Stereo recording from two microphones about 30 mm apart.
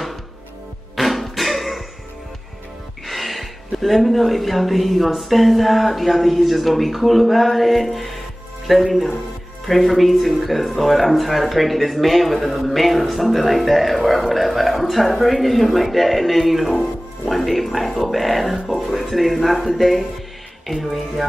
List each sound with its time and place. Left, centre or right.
0.9 s music: centre
3.1 s speech: centre